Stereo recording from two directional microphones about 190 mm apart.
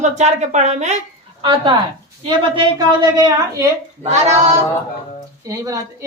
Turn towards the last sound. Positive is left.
turn(degrees=-15)  # may be behind; listen again after turning